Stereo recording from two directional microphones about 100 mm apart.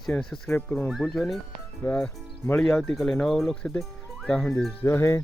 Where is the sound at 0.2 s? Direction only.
10° left (ahead or behind).